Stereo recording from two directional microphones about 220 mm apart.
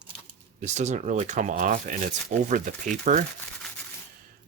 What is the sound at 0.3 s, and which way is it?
Speech, 30° right (ahead or behind).